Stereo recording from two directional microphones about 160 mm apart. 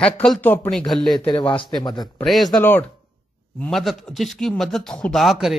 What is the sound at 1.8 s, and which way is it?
Speech, 25° left (ahead or behind).